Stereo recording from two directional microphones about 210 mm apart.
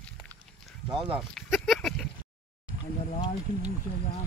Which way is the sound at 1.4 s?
Centre (ahead or behind).